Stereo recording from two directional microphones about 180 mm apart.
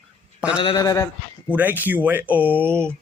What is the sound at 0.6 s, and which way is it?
Speech, 20° left (ahead or behind).